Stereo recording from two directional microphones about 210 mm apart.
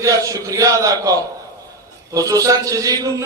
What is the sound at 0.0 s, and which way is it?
Mantra, 15° right (ahead or behind).